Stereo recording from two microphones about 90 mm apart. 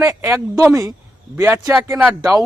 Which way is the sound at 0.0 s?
30° right (ahead or behind).